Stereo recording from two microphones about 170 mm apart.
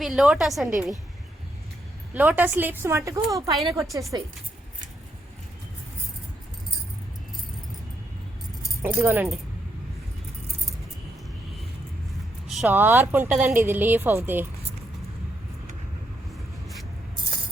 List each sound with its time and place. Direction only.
0.0 s a woman's voice: centre (ahead or behind)
2.1 s a woman's voice: 10° right (ahead or behind)
8.8 s a woman's voice: 15° right (ahead or behind)
12.5 s a woman's voice: 5° right (ahead or behind)